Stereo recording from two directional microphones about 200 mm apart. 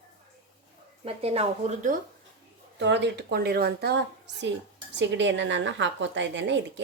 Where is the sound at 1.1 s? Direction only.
30° right (ahead or behind).